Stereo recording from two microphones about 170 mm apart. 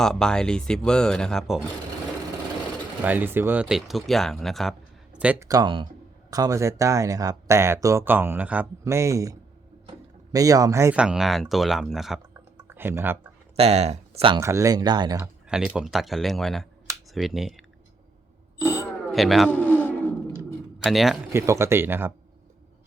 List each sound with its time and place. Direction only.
0.0 s speech: 5° left (ahead or behind)
3.0 s speech: 10° right (ahead or behind)
5.1 s speech: 10° right (ahead or behind)
5.5 s speech: 25° right (ahead or behind)
10.9 s speech: 5° right (ahead or behind)
12.6 s typing: 10° right (ahead or behind)
13.6 s speech: 40° right (ahead or behind)
14.4 s speech: 20° right (ahead or behind)
15.2 s speech: 5° right (ahead or behind)
18.6 s a sound: 15° left (ahead or behind)
19.1 s speech: centre (ahead or behind)
19.5 s bird: 10° left (ahead or behind)
20.7 s a man's voice: centre (ahead or behind)
21.3 s speech: 15° right (ahead or behind)